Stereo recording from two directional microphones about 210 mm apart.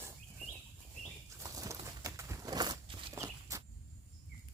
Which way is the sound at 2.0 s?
15° right (ahead or behind).